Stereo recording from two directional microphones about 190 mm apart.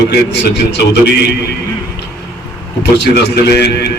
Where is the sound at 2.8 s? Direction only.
60° left (ahead or behind).